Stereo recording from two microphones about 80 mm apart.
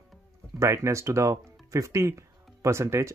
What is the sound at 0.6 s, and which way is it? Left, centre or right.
Speech, right.